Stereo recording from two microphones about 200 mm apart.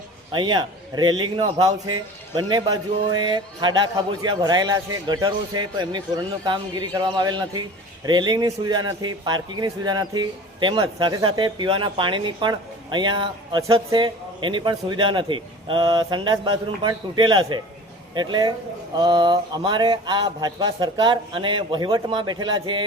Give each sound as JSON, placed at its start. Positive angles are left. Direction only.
{"t": 0.3, "sound": "a woman's voice", "side_deg": -25}